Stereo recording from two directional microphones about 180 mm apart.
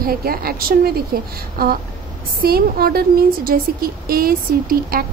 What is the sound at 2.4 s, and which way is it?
A woman's voice, 55° right (ahead or behind).